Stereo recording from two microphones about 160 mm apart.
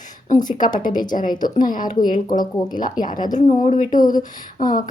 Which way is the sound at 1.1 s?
55° left (ahead or behind).